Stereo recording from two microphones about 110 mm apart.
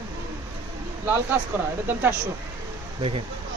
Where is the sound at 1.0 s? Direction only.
15° right (ahead or behind).